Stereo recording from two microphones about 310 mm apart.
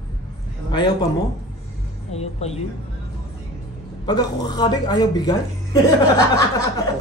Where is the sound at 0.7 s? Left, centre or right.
Centre.